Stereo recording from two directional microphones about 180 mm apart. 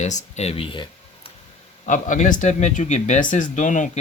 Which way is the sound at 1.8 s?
45° left (ahead or behind).